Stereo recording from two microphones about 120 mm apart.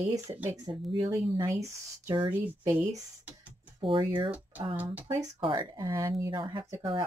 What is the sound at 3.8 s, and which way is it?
Speech, 45° right (ahead or behind).